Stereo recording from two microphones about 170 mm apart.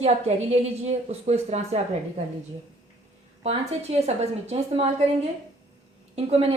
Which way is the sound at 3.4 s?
35° right (ahead or behind).